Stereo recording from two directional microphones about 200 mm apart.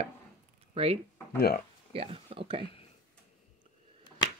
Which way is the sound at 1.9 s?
30° right (ahead or behind).